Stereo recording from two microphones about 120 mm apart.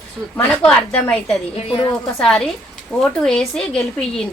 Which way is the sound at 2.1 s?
5° left (ahead or behind).